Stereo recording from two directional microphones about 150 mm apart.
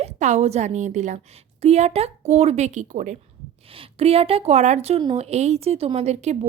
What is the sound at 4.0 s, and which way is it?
A woman's voice, 40° right (ahead or behind).